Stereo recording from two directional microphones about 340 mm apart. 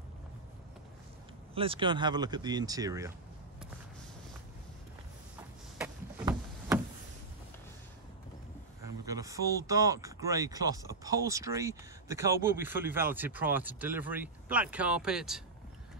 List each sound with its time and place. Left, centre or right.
1.5 s speech: centre
5.8 s a sound: centre
8.8 s speech: centre